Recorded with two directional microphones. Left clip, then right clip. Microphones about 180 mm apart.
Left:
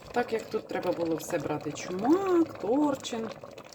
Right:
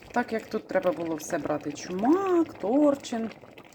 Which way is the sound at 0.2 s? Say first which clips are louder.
Right 1 dB; 15° right (ahead or behind).